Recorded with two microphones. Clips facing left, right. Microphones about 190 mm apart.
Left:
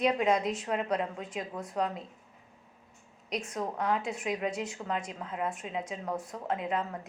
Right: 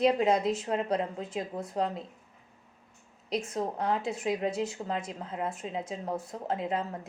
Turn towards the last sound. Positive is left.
turn(degrees=-30)  # may be behind; listen again after turning